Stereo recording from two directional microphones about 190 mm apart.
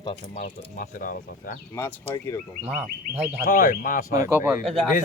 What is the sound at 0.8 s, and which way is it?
Speech, 45° left (ahead or behind).